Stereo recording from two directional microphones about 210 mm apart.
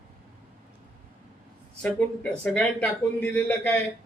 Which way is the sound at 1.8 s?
5° left (ahead or behind).